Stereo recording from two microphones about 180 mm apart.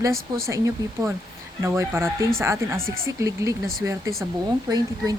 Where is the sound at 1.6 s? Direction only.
15° right (ahead or behind).